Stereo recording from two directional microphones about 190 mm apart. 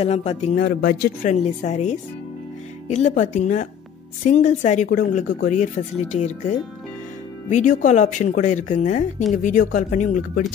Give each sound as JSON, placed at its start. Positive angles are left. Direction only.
{"t": 0.0, "sound": "speech", "side_deg": 35}
{"t": 0.7, "sound": "speech", "side_deg": 50}
{"t": 1.3, "sound": "speech", "side_deg": 35}